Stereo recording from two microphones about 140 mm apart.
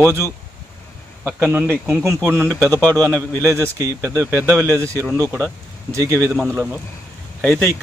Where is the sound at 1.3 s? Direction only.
15° right (ahead or behind).